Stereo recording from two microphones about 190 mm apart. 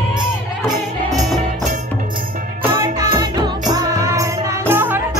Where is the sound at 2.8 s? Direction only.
20° right (ahead or behind).